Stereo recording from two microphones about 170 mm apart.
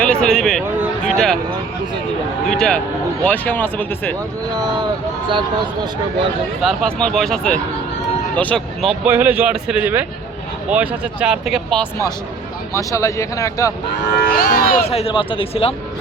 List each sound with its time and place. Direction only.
0.0 s a man's voice: 5° left (ahead or behind)
1.0 s a sound: 5° left (ahead or behind)
2.5 s speech: 5° left (ahead or behind)
6.6 s speech: centre (ahead or behind)
9.0 s speech: 10° right (ahead or behind)
12.7 s speech: 20° left (ahead or behind)
14.2 s cattle: 60° left (ahead or behind)
14.8 s speech: 35° left (ahead or behind)